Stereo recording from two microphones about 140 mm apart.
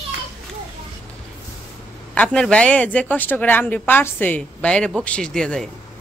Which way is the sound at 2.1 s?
10° left (ahead or behind).